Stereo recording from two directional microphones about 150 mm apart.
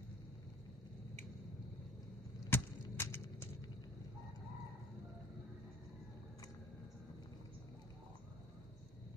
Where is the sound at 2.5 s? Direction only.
15° left (ahead or behind).